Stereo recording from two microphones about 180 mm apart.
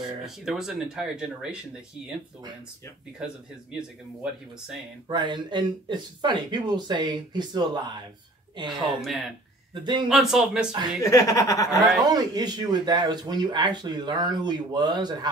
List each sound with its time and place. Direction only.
0.2 s speech: centre (ahead or behind)
3.2 s speech: 5° right (ahead or behind)
5.0 s speech: 25° right (ahead or behind)
9.0 s speech: centre (ahead or behind)
11.0 s speech: 20° left (ahead or behind)
12.1 s speech: 20° right (ahead or behind)